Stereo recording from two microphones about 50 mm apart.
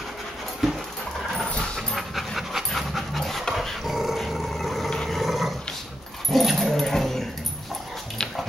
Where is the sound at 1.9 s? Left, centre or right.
Centre.